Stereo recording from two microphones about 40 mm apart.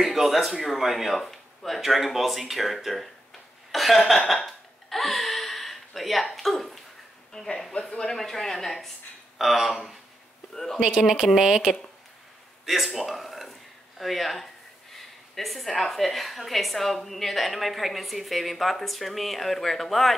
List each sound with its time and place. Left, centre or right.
0.0 s speech: centre
1.8 s speech: centre
3.7 s a sound: centre
4.4 s hiccup: centre
7.3 s speech: centre
8.2 s speech: centre
9.4 s speech: centre
11.0 s speech: centre
12.6 s speech: centre